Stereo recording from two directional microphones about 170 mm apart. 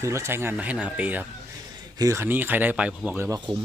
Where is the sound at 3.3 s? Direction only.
25° right (ahead or behind).